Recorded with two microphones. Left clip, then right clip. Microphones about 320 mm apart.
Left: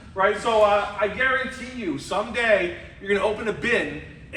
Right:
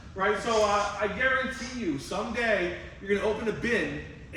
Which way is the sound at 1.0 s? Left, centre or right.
Centre.